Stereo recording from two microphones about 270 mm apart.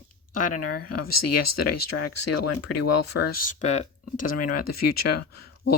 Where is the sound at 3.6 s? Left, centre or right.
Left.